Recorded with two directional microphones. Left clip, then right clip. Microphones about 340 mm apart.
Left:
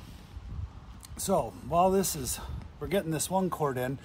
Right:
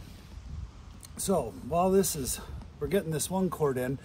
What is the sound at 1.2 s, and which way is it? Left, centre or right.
A man's voice, centre.